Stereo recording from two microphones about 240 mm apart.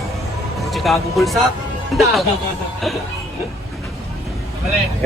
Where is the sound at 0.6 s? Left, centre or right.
Centre.